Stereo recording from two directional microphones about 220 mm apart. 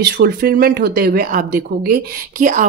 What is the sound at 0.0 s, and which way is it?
Speech, 45° right (ahead or behind).